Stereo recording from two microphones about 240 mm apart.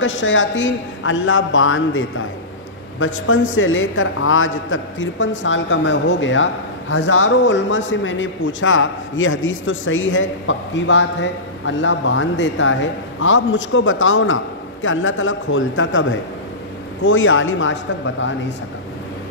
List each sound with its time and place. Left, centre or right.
0.0 s a man's voice: left